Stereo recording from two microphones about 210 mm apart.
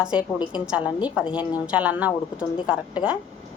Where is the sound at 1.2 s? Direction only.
20° left (ahead or behind).